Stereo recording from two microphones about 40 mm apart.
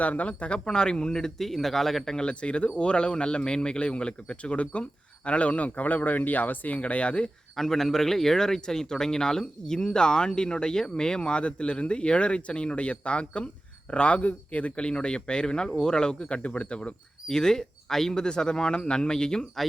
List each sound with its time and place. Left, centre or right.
0.0 s speech: left
1.1 s speech: centre
2.1 s speech: left
7.5 s speech: centre; by 16.9 s left
17.2 s speech: centre